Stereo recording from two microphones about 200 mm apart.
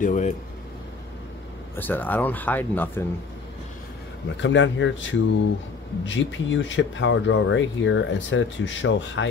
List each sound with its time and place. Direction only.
0.0 s speech: 40° left (ahead or behind)
1.8 s speech: 10° left (ahead or behind)
4.4 s speech: 65° left (ahead or behind)